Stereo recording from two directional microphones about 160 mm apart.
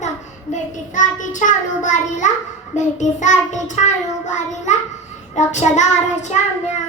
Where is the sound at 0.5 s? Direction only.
50° left (ahead or behind).